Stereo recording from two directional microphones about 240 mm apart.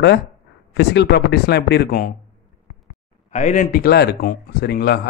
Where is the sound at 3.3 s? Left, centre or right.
Left.